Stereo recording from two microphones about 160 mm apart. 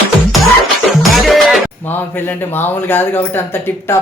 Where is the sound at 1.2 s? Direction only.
Centre (ahead or behind).